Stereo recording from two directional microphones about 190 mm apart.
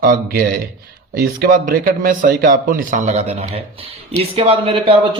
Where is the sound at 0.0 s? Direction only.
50° right (ahead or behind).